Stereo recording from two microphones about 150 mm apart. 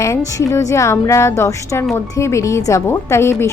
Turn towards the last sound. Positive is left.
turn(degrees=15)  # may be behind; listen again after turning